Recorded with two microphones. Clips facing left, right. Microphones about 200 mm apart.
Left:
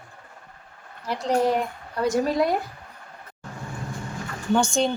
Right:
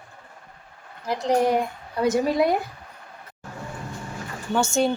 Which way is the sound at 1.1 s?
15° right (ahead or behind).